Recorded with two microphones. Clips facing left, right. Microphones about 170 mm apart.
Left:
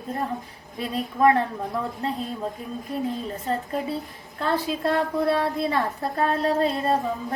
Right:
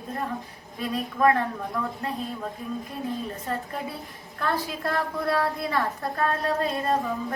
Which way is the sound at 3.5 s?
25° left (ahead or behind).